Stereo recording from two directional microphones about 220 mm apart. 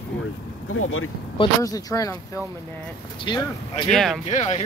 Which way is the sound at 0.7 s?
70° left (ahead or behind).